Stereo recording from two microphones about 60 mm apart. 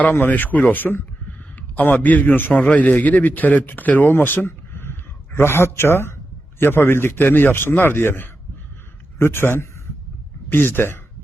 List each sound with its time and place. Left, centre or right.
0.0 s a man's voice: left